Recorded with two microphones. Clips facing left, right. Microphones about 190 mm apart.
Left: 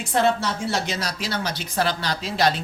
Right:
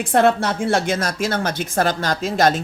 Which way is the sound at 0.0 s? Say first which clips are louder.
Right 5 dB; 55° right (ahead or behind).